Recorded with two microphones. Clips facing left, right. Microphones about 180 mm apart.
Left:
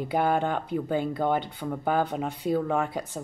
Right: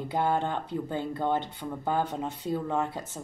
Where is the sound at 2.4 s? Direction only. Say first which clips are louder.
Left 4 dB; 15° left (ahead or behind).